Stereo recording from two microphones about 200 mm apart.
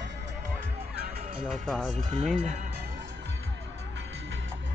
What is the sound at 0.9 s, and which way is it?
Music, 50° right (ahead or behind).